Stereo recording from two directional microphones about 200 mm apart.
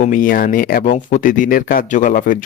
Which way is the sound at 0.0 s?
40° left (ahead or behind).